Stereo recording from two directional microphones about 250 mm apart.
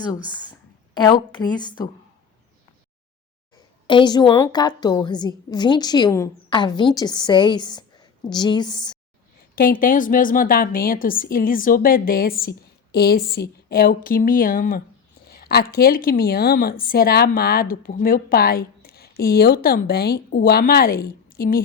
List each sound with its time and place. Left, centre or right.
0.9 s a woman's voice: centre
3.8 s a woman's voice: centre
9.6 s a woman's voice: left